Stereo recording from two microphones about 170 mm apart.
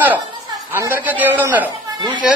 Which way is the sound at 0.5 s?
15° right (ahead or behind).